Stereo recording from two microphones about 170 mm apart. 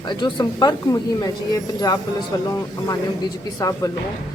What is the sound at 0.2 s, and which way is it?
Speech, 25° left (ahead or behind).